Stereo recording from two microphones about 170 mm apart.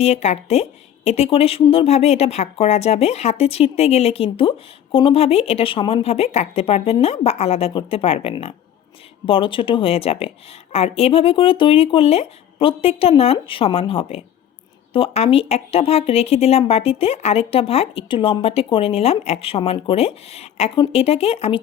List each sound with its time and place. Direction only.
0.0 s speech: 40° left (ahead or behind)